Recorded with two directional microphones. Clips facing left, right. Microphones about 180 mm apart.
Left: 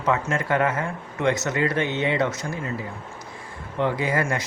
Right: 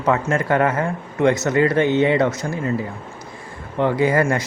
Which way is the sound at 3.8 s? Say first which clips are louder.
Right 6 dB; 50° right (ahead or behind).